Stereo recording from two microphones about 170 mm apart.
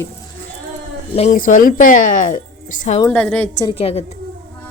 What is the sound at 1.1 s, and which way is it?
A woman's voice, 45° left (ahead or behind).